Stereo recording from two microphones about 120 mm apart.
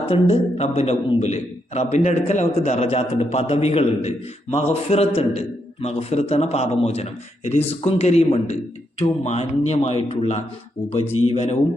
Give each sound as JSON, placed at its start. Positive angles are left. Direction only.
{"t": 0.0, "sound": "a man's voice", "side_deg": 50}